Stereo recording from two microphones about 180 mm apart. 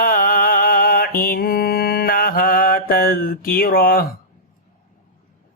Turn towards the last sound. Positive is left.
turn(degrees=55)  # may be behind; listen again after turning